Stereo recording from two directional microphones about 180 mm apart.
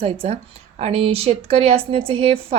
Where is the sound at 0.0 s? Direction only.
35° right (ahead or behind).